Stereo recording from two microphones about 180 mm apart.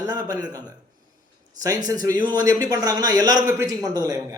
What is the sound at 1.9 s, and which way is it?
A man's voice, 20° right (ahead or behind).